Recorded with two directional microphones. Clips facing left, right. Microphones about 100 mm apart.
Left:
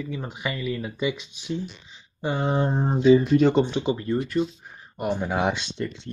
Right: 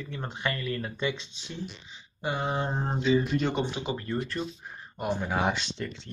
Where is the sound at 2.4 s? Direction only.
Centre (ahead or behind).